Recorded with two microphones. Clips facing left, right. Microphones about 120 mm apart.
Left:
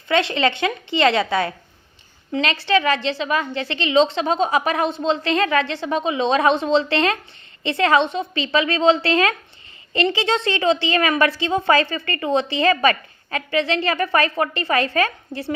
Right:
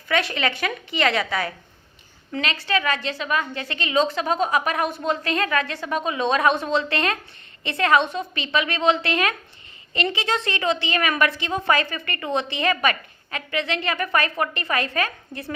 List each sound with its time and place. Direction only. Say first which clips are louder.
0.1 s a woman's voice: left 4 dB; 25° left (ahead or behind)